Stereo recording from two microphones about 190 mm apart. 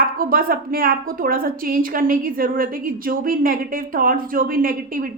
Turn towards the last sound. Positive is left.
turn(degrees=-50)  # may be behind; listen again after turning